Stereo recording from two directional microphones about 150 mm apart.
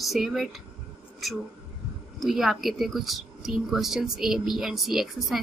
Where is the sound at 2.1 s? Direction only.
Centre (ahead or behind).